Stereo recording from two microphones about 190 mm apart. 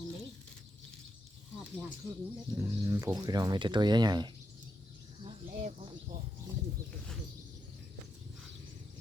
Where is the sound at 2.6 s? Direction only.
15° right (ahead or behind).